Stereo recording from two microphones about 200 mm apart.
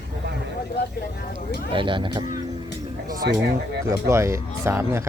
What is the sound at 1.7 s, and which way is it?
Speech, 25° right (ahead or behind).